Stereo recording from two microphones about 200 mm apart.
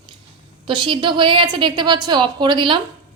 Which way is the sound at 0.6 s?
25° right (ahead or behind).